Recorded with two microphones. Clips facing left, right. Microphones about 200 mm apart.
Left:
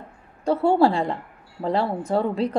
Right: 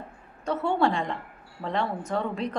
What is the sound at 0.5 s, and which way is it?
A woman's voice, 30° left (ahead or behind).